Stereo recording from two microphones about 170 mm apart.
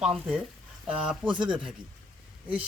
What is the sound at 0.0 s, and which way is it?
Speech, 5° right (ahead or behind).